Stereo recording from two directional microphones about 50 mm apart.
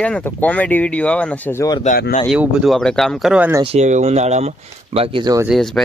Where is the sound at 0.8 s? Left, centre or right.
Left.